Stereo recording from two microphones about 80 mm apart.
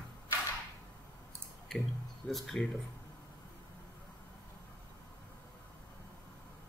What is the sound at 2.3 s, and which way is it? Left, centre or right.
Speech, centre.